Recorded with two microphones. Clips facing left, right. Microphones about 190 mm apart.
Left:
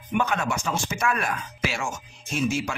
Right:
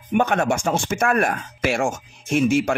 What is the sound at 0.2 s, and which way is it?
Speech, 50° right (ahead or behind).